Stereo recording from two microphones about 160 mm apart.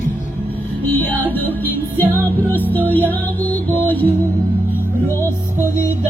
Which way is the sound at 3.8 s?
10° left (ahead or behind).